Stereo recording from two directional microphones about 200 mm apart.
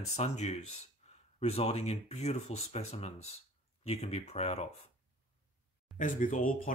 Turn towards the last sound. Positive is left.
turn(degrees=40)  # may be behind; listen again after turning